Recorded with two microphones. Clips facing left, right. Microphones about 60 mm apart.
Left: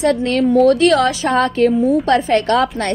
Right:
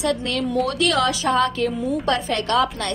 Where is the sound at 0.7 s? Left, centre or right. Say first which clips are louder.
Left 8 dB; left.